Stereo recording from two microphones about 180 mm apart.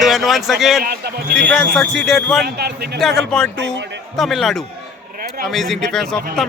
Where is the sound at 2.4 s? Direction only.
65° right (ahead or behind).